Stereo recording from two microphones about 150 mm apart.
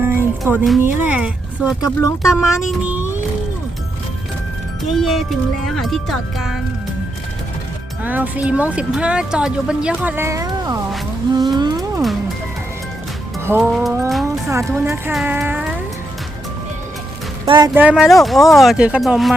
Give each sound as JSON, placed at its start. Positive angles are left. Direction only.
{"t": 0.0, "sound": "music", "side_deg": -15}
{"t": 0.8, "sound": "speech", "side_deg": -10}
{"t": 1.8, "sound": "speech", "side_deg": 20}
{"t": 2.5, "sound": "speech", "side_deg": -5}
{"t": 4.9, "sound": "speech", "side_deg": 0}
{"t": 8.0, "sound": "speech", "side_deg": -10}
{"t": 11.3, "sound": "a sound", "side_deg": -25}
{"t": 13.6, "sound": "speech", "side_deg": 0}
{"t": 14.3, "sound": "speech", "side_deg": -20}
{"t": 17.4, "sound": "speech", "side_deg": -35}
{"t": 17.9, "sound": "speech", "side_deg": 0}